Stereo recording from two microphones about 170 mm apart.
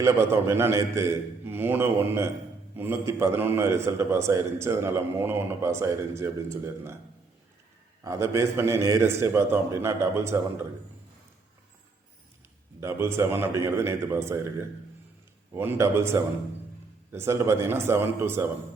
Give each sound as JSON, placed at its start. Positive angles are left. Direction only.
{"t": 0.0, "sound": "a man's voice", "side_deg": -15}
{"t": 8.0, "sound": "a man's voice", "side_deg": -15}
{"t": 12.8, "sound": "a man's voice", "side_deg": -15}
{"t": 15.5, "sound": "a man's voice", "side_deg": -15}